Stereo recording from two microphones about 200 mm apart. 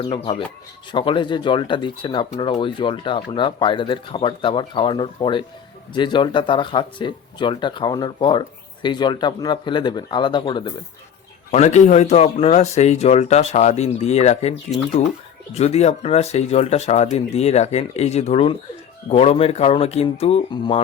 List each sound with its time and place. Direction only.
0.9 s speech: 25° left (ahead or behind)
11.5 s speech: 35° left (ahead or behind)
15.5 s speech: 35° left (ahead or behind)